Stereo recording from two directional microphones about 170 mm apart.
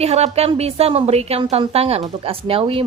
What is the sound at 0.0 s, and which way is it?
Speech, 40° right (ahead or behind).